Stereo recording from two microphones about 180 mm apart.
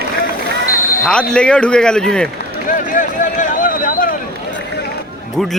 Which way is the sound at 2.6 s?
45° left (ahead or behind).